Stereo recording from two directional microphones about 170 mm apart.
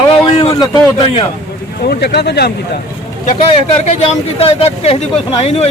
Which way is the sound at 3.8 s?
35° left (ahead or behind).